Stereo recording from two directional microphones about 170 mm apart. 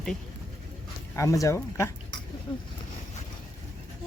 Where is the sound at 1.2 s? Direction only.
20° left (ahead or behind).